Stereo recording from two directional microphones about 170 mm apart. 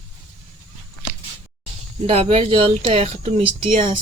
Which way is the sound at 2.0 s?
35° right (ahead or behind).